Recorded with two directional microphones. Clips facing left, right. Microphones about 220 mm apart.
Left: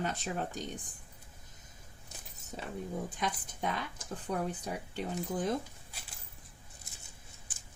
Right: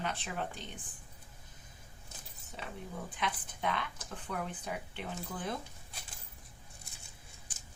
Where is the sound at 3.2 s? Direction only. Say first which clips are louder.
Right 3 dB; 40° left (ahead or behind).